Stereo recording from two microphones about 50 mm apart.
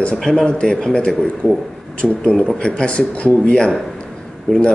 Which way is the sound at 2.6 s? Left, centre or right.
Left.